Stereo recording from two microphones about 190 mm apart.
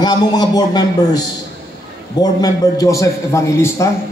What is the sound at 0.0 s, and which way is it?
A man's voice, 20° left (ahead or behind).